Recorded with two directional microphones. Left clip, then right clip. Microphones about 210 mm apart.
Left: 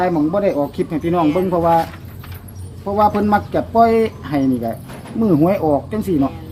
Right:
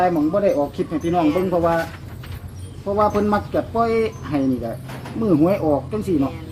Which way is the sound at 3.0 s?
45° left (ahead or behind).